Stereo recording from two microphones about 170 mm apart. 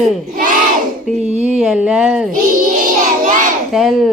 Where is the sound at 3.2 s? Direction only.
50° right (ahead or behind).